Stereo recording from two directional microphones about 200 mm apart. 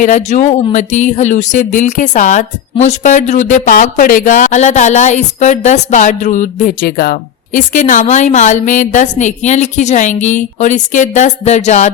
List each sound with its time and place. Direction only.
0.0 s speech: 40° left (ahead or behind)